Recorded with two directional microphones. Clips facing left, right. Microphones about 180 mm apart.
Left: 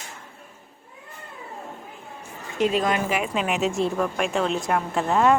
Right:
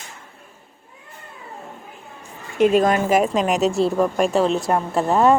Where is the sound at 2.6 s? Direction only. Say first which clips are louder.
Right 6 dB; 50° right (ahead or behind).